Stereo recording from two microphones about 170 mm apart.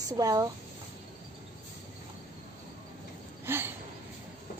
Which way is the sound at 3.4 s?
15° right (ahead or behind).